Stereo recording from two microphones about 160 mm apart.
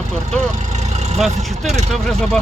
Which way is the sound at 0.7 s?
45° right (ahead or behind).